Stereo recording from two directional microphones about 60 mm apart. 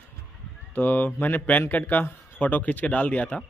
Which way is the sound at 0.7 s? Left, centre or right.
Left.